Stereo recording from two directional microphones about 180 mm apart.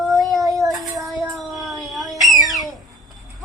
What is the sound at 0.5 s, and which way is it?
Child singing, 20° right (ahead or behind).